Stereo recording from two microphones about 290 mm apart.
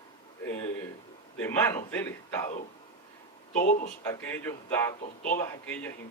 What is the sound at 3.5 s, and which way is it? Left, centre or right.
Speech, left.